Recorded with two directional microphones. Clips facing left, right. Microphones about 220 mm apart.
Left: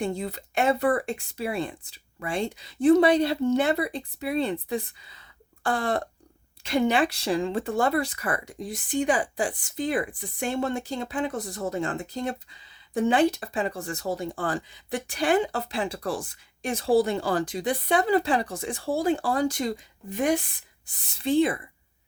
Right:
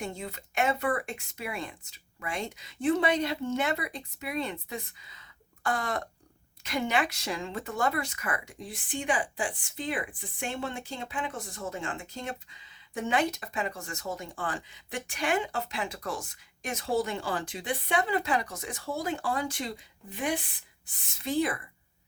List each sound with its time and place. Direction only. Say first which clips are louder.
0.0 s speech: left 8 dB; 35° left (ahead or behind)
21.0 s speech: left 7 dB; 35° left (ahead or behind)